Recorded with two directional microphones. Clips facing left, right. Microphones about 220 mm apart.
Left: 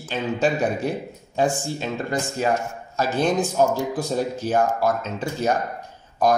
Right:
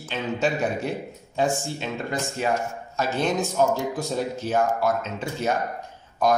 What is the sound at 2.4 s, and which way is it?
Speech, 40° left (ahead or behind).